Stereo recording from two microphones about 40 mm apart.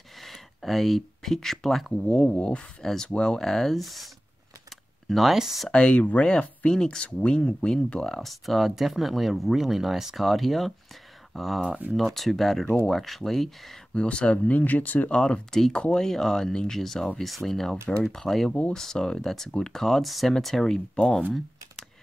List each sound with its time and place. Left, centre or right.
0.2 s speech: centre
2.3 s speech: left
2.8 s speech: centre
4.6 s a sound: centre
5.7 s speech: left
7.0 s speech: left
8.0 s speech: centre
13.9 s speech: left
15.0 s speech: left
16.0 s speech: centre